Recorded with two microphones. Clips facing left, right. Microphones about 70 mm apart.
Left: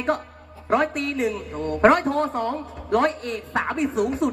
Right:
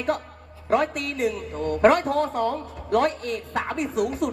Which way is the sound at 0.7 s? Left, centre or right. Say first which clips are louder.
Left 1 dB; left.